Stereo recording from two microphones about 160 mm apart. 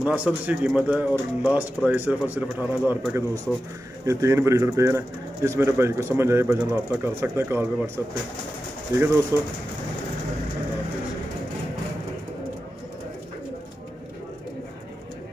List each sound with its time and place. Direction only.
0.0 s speech: 10° right (ahead or behind)